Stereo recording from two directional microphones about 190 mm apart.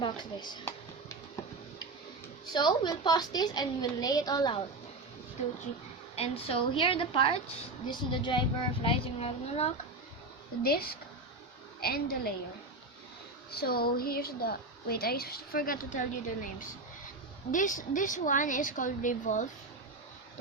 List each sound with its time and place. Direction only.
0.0 s a woman's voice: 25° left (ahead or behind)
2.5 s a woman's voice: 25° left (ahead or behind)
6.1 s a woman's voice: 30° left (ahead or behind)
10.6 s a woman's voice: 55° left (ahead or behind)
13.5 s a woman's voice: 55° left (ahead or behind)